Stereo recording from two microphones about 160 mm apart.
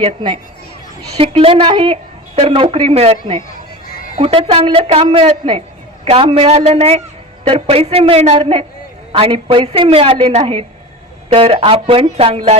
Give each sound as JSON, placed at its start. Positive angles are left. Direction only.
{"t": 0.0, "sound": "speech", "side_deg": -35}